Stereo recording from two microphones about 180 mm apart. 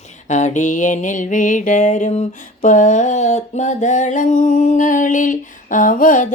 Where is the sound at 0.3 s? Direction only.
40° left (ahead or behind).